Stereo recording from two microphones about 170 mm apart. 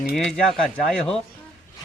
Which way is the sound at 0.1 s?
Centre (ahead or behind).